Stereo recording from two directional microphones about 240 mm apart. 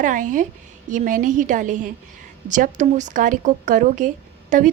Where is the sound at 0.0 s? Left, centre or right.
Right.